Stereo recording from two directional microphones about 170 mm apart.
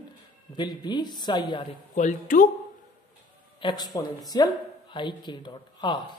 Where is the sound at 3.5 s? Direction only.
25° left (ahead or behind).